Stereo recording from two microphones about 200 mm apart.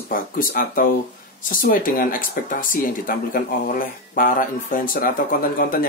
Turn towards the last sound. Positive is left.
turn(degrees=45)  # may be behind; listen again after turning